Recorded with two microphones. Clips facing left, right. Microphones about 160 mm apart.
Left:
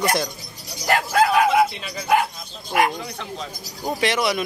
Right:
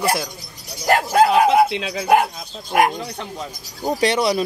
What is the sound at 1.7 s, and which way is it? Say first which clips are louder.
Speech: right 8 dB; 90° right.